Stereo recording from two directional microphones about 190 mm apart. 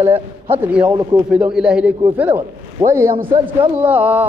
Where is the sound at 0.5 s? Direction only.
10° right (ahead or behind).